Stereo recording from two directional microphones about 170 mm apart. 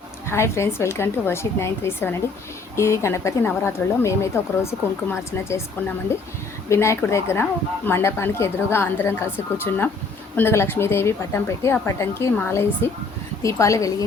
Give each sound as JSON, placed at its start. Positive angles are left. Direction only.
{"t": 0.3, "sound": "a woman's voice", "side_deg": 15}